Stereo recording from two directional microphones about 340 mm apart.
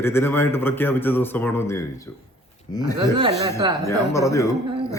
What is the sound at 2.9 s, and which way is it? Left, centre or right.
Speech, centre.